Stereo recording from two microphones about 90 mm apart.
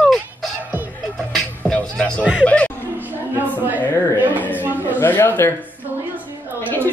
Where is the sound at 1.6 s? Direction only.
10° left (ahead or behind).